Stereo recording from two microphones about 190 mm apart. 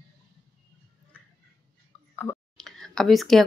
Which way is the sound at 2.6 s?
Centre (ahead or behind).